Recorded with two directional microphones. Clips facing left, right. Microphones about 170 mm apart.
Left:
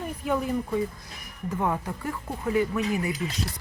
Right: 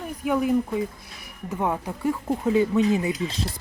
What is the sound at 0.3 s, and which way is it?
Speech, 5° right (ahead or behind).